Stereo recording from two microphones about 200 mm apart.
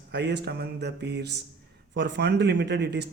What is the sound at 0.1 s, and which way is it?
Speech, 60° right (ahead or behind).